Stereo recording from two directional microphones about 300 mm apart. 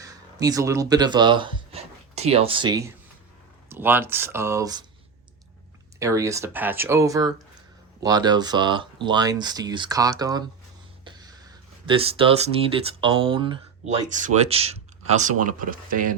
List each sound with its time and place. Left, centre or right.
0.0 s speech: centre
6.0 s speech: centre
11.0 s a sound: centre
11.9 s speech: centre